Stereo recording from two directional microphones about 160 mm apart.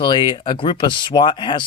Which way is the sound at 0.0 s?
30° left (ahead or behind).